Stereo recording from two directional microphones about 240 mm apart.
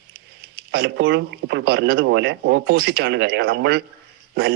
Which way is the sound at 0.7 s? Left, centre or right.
Right.